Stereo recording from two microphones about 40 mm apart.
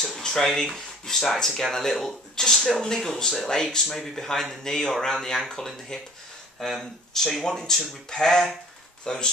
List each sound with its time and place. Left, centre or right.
0.0 s speech: centre